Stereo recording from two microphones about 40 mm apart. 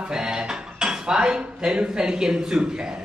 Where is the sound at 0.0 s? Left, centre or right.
Centre.